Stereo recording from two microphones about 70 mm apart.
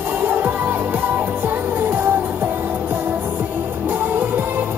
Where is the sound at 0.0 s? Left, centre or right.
Right.